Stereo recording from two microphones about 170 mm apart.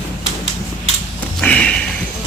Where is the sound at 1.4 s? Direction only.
5° left (ahead or behind).